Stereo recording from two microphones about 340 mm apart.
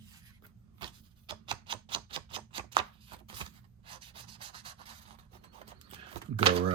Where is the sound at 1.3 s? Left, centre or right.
Centre.